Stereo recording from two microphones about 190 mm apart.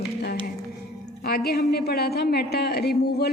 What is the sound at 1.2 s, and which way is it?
A man's voice, 55° left (ahead or behind).